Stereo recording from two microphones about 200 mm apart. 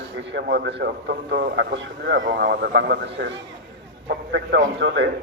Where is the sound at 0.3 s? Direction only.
60° right (ahead or behind).